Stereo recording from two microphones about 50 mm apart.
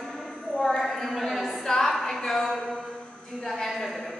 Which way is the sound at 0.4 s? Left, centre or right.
Centre.